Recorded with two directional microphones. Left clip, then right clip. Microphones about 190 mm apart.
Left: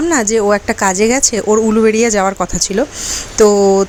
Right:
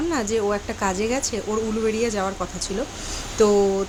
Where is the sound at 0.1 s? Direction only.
40° left (ahead or behind).